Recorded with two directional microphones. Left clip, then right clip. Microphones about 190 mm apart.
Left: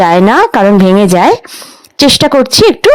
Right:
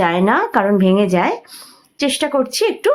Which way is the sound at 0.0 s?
45° left (ahead or behind).